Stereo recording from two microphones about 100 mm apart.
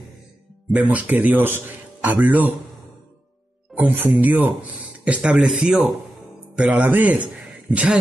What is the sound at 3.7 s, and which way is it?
Speech, 15° right (ahead or behind).